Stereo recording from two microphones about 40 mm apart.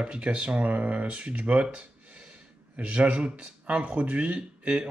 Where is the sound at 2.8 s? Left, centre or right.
Right.